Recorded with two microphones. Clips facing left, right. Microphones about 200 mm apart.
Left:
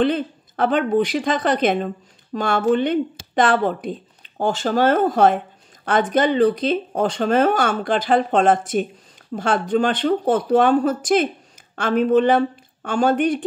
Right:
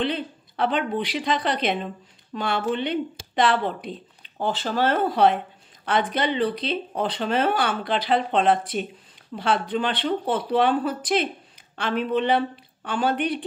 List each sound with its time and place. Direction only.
0.0 s speech: 45° left (ahead or behind)